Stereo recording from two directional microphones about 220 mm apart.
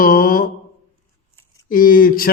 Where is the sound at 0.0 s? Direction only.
40° left (ahead or behind).